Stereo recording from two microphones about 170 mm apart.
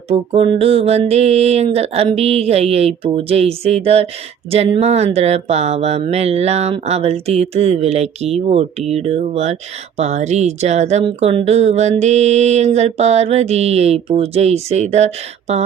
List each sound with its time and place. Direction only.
0.1 s speech: 35° right (ahead or behind)